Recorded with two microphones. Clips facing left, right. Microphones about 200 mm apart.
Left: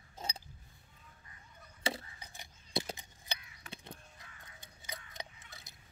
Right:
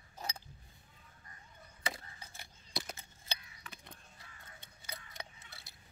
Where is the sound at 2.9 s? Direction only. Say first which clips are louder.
Left 1 dB; 15° left (ahead or behind).